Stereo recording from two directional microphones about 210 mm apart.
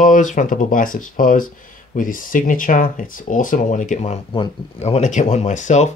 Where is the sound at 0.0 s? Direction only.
40° left (ahead or behind).